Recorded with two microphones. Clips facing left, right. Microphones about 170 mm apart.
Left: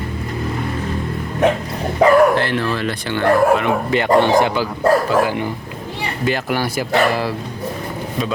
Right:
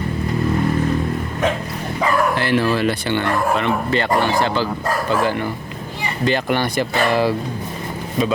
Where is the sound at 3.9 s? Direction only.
15° left (ahead or behind); by 7.4 s centre (ahead or behind).